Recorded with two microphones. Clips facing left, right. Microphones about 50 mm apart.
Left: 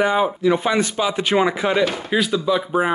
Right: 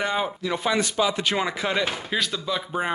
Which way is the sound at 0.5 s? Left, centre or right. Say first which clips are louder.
Left 3 dB; left.